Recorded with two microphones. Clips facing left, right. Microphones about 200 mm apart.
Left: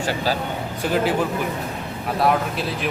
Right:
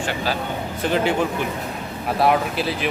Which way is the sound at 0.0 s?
40° left (ahead or behind).